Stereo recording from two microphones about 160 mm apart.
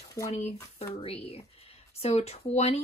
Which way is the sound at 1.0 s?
40° left (ahead or behind).